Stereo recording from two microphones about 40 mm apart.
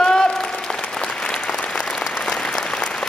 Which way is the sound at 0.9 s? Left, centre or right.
Centre.